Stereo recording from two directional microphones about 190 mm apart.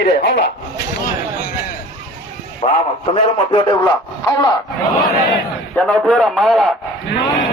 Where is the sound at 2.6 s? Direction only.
30° left (ahead or behind).